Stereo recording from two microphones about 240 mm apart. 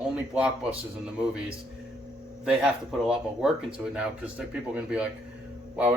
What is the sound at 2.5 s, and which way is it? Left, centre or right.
Speech, centre.